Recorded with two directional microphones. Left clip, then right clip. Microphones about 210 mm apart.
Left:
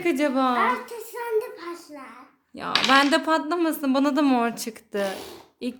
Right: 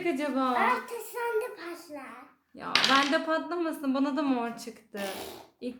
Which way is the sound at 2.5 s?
45° left (ahead or behind).